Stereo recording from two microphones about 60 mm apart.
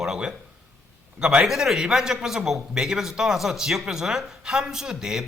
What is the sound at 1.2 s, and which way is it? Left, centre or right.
Speech, centre.